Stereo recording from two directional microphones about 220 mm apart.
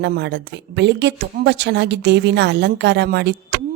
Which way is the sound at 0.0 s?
50° right (ahead or behind).